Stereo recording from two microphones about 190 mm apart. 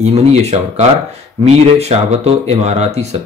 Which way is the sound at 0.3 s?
35° right (ahead or behind).